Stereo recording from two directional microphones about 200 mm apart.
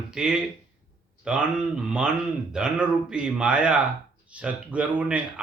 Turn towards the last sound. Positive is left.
turn(degrees=-5)  # may be behind; listen again after turning